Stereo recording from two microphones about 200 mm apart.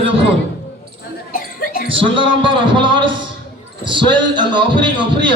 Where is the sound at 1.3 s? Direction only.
45° left (ahead or behind).